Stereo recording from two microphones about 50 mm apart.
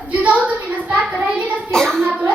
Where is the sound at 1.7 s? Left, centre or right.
Centre.